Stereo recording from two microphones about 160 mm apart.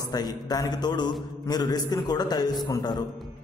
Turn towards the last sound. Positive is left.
turn(degrees=25)  # may be behind; listen again after turning